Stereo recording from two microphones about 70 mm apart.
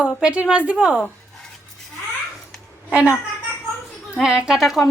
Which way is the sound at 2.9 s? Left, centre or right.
Right.